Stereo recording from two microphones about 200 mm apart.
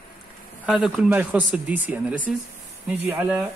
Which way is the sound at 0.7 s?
5° right (ahead or behind).